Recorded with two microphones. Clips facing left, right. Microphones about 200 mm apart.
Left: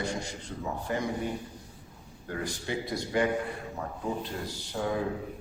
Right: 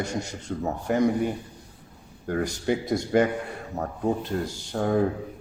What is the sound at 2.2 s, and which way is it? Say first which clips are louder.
A man's voice: right 9 dB; 45° right (ahead or behind).